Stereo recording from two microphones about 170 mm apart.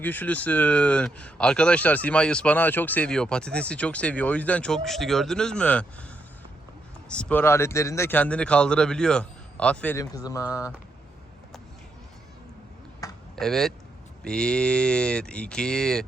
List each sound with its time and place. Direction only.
0.0 s speech: 10° left (ahead or behind)
7.1 s speech: 5° left (ahead or behind)
10.0 s speech: 20° left (ahead or behind)
13.3 s speech: centre (ahead or behind)